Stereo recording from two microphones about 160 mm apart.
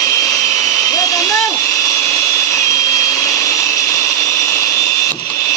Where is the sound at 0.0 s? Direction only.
20° left (ahead or behind).